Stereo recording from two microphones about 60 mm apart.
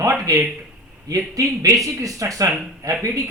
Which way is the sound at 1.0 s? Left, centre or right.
Right.